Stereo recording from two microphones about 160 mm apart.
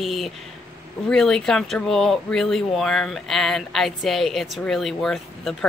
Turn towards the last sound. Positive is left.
turn(degrees=0)  # may be behind; listen again after turning